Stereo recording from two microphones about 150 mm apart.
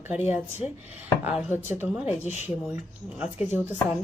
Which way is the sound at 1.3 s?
10° right (ahead or behind).